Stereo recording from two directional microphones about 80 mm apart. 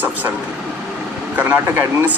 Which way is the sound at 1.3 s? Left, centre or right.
Right.